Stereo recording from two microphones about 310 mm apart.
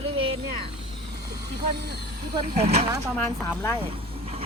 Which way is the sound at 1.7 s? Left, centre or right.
Right.